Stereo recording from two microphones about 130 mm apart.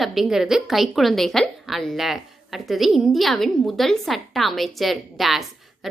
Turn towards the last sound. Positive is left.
turn(degrees=0)  # may be behind; listen again after turning